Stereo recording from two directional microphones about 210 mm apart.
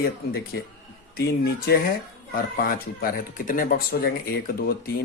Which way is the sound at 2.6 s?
40° left (ahead or behind).